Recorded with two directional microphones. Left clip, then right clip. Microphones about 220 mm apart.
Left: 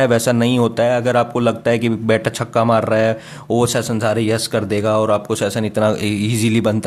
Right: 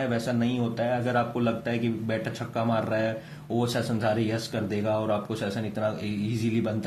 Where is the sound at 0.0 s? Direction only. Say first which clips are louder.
Left 13 dB; 40° left (ahead or behind).